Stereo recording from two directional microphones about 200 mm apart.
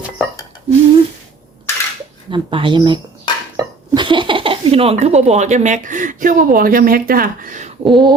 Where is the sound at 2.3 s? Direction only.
25° right (ahead or behind).